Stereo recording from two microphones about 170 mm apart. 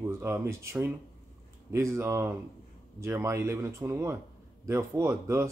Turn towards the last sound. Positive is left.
turn(degrees=-15)  # may be behind; listen again after turning